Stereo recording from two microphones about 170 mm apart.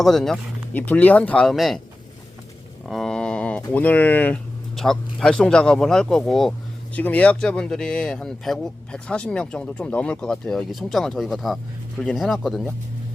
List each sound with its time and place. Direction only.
0.0 s speech: centre (ahead or behind)
2.8 s speech: centre (ahead or behind)